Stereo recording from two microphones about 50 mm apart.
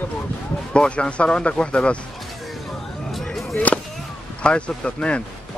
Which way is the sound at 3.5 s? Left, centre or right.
Left.